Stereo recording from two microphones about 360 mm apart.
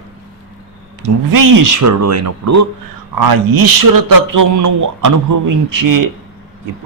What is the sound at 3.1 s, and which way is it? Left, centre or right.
A man's voice, right.